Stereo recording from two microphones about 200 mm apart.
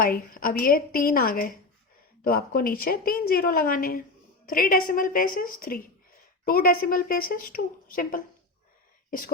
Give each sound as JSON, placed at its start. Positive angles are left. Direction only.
{"t": 0.0, "sound": "a woman's voice", "side_deg": 45}